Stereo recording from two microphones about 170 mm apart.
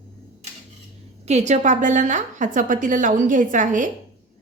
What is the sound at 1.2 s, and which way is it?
A woman's voice, 40° right (ahead or behind).